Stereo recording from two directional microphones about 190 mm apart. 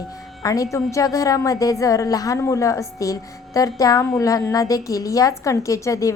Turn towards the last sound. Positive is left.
turn(degrees=15)  # may be behind; listen again after turning